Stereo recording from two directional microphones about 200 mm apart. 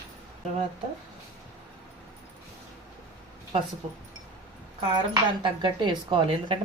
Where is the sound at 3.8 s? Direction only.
30° right (ahead or behind).